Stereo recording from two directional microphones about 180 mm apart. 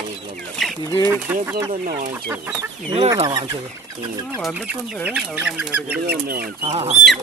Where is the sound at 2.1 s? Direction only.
10° right (ahead or behind).